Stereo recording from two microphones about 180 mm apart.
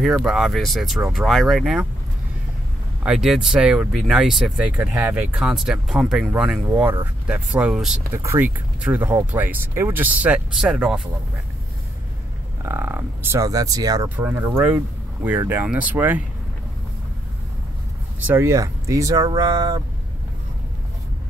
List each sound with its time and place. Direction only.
0.0 s speech: centre (ahead or behind)
3.0 s speech: 5° right (ahead or behind)
8.1 s speech: 15° right (ahead or behind)
12.6 s speech: 15° right (ahead or behind)
18.2 s speech: 15° right (ahead or behind)